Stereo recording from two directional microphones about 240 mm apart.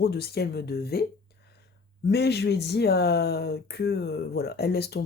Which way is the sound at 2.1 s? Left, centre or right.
Left.